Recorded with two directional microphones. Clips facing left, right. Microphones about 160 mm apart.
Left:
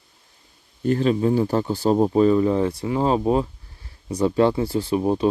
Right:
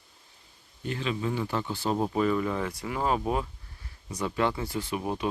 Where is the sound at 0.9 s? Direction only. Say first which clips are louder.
Left 11 dB; 40° left (ahead or behind).